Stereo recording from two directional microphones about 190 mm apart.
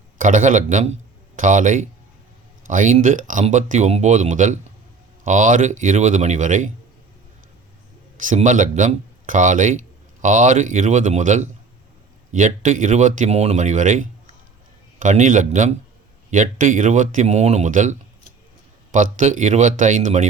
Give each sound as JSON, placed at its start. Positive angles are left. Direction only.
{"t": 0.2, "sound": "speech", "side_deg": -40}
{"t": 8.2, "sound": "speech", "side_deg": -40}
{"t": 19.1, "sound": "speech", "side_deg": -40}